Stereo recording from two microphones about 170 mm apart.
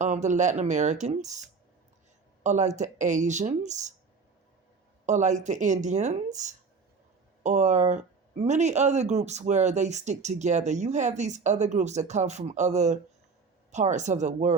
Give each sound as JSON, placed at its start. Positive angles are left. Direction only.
{"t": 0.0, "sound": "speech", "side_deg": -45}
{"t": 5.0, "sound": "speech", "side_deg": -45}